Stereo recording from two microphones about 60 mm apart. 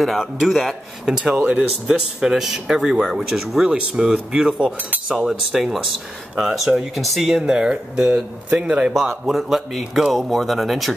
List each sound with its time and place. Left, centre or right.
0.0 s speech: centre
1.1 s speech: right
1.6 s speech: centre